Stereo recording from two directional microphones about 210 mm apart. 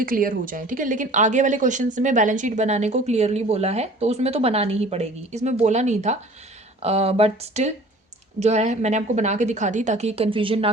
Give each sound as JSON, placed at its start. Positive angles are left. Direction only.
{"t": 0.0, "sound": "speech", "side_deg": -40}